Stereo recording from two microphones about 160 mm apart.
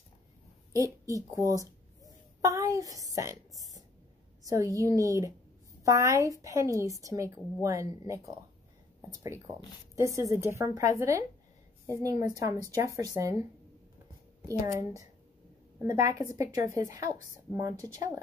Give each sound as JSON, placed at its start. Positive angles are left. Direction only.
{"t": 1.0, "sound": "a woman's voice", "side_deg": -20}